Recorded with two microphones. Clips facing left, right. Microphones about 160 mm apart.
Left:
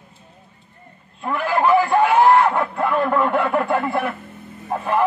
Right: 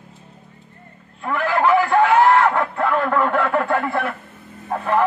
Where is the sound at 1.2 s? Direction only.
15° left (ahead or behind).